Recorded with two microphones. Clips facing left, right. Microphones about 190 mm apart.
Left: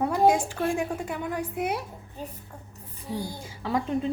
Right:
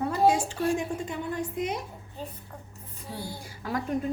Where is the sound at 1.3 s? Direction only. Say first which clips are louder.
Left 1 dB; 65° left (ahead or behind).